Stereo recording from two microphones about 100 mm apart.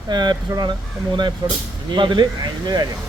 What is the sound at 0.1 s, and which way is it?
Speech, 45° right (ahead or behind).